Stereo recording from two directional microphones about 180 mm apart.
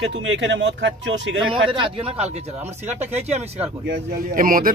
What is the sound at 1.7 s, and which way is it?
A man's voice, 30° right (ahead or behind).